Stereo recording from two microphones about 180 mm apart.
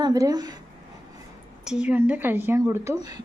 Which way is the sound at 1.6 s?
5° right (ahead or behind).